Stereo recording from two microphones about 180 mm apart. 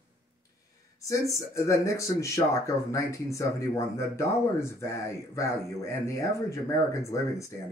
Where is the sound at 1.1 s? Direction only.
15° left (ahead or behind).